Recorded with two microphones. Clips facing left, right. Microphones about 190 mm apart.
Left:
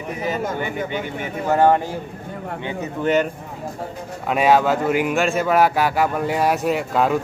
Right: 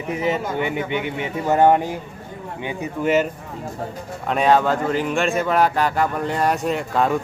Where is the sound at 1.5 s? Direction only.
15° right (ahead or behind).